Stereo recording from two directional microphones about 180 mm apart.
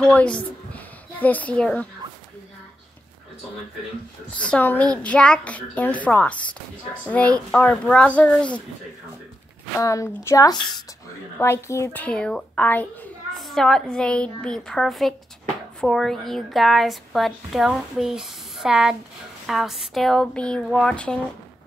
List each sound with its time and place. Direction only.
0.0 s speech: 5° left (ahead or behind)
4.3 s a woman's voice: 5° left (ahead or behind)
9.8 s a woman's voice: 15° left (ahead or behind)